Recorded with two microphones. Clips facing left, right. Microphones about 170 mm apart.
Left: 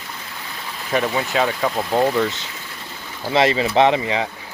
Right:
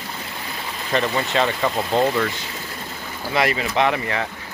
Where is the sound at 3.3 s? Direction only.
25° left (ahead or behind).